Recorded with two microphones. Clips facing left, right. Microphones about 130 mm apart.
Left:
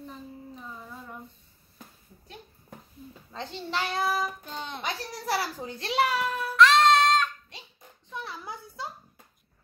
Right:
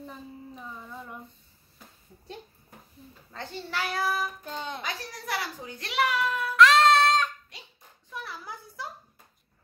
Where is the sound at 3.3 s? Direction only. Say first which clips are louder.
Left 2 dB; 20° left (ahead or behind).